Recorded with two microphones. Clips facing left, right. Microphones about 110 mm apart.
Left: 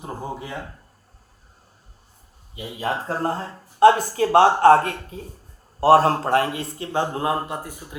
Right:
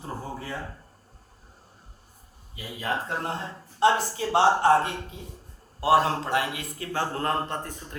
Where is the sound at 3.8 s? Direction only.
55° left (ahead or behind); by 7.9 s 10° left (ahead or behind).